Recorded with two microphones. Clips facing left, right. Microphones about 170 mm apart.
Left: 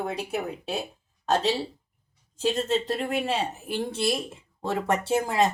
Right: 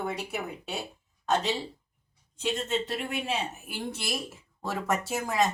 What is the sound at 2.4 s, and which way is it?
Speech, 35° left (ahead or behind).